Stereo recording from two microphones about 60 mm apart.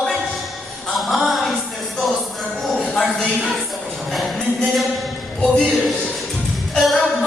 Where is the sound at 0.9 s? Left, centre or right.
Centre.